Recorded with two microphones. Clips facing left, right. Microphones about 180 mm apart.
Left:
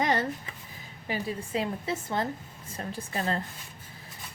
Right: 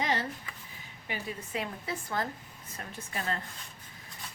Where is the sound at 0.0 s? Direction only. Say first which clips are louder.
Left 5 dB; 50° left (ahead or behind).